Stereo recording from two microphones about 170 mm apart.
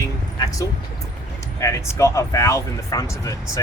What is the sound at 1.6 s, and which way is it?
Speech, 15° left (ahead or behind).